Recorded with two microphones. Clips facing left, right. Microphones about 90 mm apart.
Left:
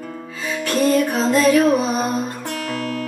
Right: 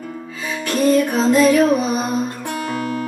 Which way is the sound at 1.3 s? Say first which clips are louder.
Right 1 dB; 15° right (ahead or behind).